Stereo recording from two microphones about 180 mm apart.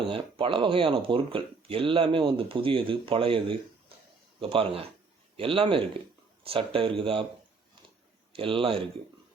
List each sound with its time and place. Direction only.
0.1 s speech: 30° right (ahead or behind)
8.3 s speech: 30° right (ahead or behind)